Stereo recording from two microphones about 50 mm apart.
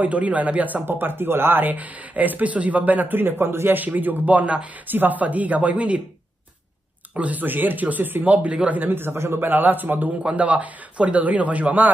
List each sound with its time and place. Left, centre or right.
0.0 s speech: right
0.8 s speech: right
3.8 s speech: right
4.8 s speech: right
7.2 s speech: right
10.2 s speech: right